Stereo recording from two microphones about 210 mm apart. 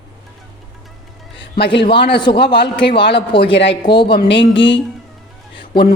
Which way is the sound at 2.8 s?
25° left (ahead or behind).